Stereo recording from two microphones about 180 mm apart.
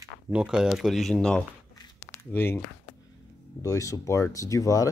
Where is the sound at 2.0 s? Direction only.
10° left (ahead or behind).